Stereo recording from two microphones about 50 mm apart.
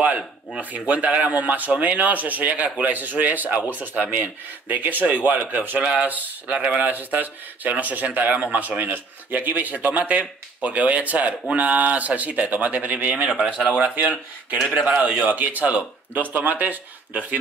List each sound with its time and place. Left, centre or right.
0.6 s speech: right
5.8 s speech: right